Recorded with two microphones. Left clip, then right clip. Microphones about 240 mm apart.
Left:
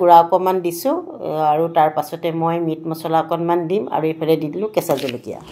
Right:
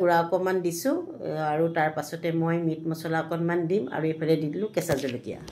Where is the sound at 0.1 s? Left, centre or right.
Left.